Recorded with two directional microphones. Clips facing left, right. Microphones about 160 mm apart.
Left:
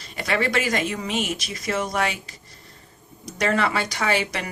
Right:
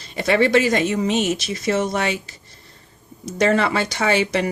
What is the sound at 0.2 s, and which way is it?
Speech, 25° right (ahead or behind).